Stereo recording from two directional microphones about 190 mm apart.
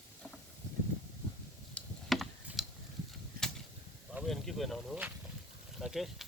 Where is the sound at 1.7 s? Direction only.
Centre (ahead or behind).